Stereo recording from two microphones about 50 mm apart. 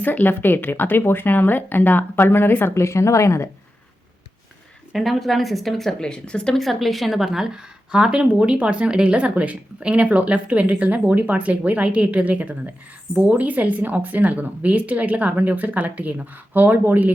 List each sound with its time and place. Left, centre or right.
0.0 s speech: left
2.7 s speech: left
4.9 s speech: centre
6.0 s a woman's voice: centre
6.6 s a woman's voice: centre; by 17.1 s right